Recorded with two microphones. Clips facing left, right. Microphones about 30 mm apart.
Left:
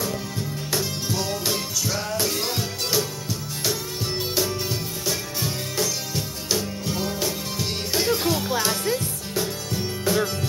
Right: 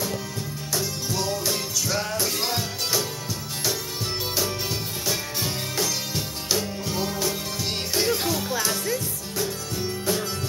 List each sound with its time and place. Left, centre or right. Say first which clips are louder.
0.7 s music: left 1 dB; centre
1.9 s music: right 2 dB; centre
5.0 s music: even; centre
7.5 s music: left 1 dB; centre
8.3 s music: left 2 dB; left